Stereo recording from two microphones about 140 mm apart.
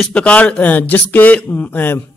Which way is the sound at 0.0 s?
10° left (ahead or behind).